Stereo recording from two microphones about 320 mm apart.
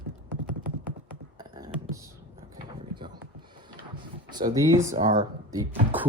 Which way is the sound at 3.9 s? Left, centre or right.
Centre.